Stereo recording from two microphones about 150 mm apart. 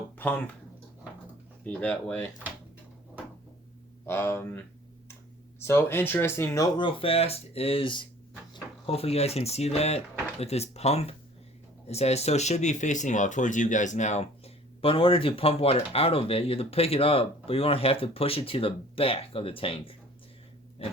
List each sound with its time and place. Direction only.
0.2 s speech: 10° left (ahead or behind)
1.6 s speech: 10° left (ahead or behind)
4.0 s speech: 15° left (ahead or behind)
5.6 s speech: 15° left (ahead or behind); by 20.0 s 40° left (ahead or behind)